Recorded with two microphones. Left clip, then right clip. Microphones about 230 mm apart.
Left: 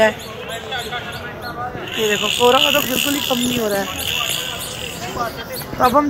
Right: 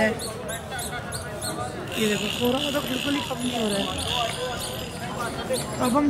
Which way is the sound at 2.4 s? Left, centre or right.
Left.